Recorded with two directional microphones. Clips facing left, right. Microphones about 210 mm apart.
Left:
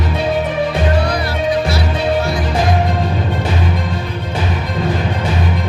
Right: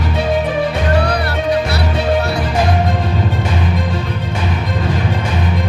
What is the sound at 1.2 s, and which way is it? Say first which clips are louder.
Music: even; 65° right (ahead or behind).